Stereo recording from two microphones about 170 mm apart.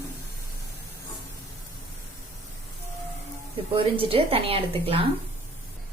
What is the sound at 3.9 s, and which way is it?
A woman's voice, 30° right (ahead or behind).